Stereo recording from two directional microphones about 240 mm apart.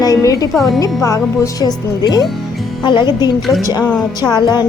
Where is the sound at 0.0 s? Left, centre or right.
Centre.